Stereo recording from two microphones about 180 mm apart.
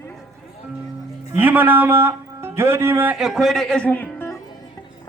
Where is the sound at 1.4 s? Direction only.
10° right (ahead or behind); by 4.4 s 10° left (ahead or behind).